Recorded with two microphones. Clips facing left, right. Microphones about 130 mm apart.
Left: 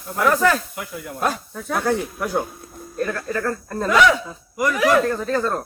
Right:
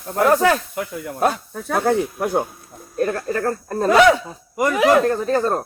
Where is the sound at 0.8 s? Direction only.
50° right (ahead or behind).